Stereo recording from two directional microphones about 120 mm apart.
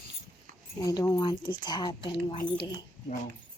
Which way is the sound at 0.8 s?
30° left (ahead or behind).